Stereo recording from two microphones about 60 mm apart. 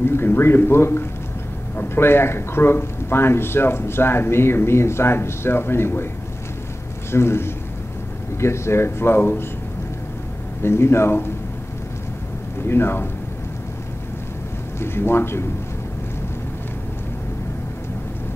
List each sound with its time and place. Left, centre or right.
0.0 s speech: left
7.1 s speech: left
10.6 s speech: left
12.6 s speech: left
14.8 s speech: left